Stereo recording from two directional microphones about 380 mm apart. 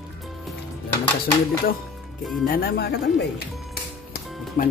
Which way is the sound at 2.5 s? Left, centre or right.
Left.